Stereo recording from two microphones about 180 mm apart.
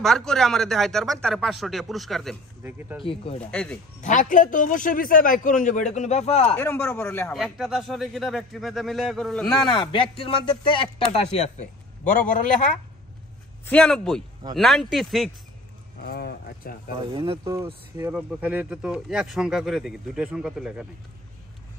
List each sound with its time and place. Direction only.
0.0 s speech: 5° left (ahead or behind)
2.6 s speech: 10° right (ahead or behind)
3.0 s speech: 30° left (ahead or behind)
3.5 s speech: 5° left (ahead or behind)
4.0 s a man's voice: 45° left (ahead or behind)
6.5 s speech: 10° left (ahead or behind)
7.3 s speech: centre (ahead or behind)
9.5 s speech: 25° left (ahead or behind)
13.7 s speech: 5° left (ahead or behind)
16.0 s speech: 60° left (ahead or behind)
17.1 s speech: 30° right (ahead or behind)
18.1 s speech: 5° right (ahead or behind)